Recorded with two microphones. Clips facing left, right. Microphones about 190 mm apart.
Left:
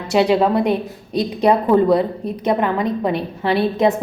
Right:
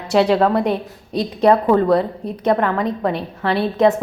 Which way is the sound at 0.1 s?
10° left (ahead or behind).